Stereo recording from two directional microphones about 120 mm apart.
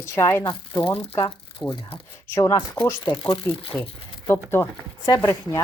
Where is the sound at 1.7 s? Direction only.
50° left (ahead or behind).